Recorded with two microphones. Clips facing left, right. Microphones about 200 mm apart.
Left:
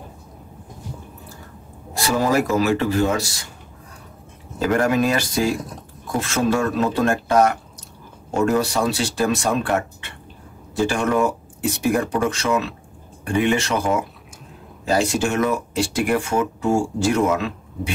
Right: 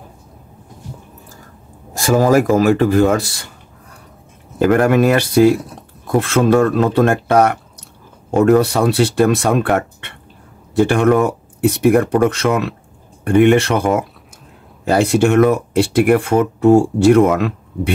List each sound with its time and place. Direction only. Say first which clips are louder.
2.0 s speech: right 7 dB; 45° right (ahead or behind)
4.6 s speech: right 6 dB; 60° right (ahead or behind)